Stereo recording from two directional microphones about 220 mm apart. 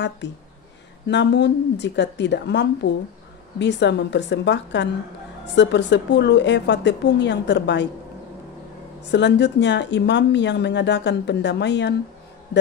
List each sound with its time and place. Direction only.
0.2 s speech: 50° left (ahead or behind)
9.1 s speech: 50° left (ahead or behind)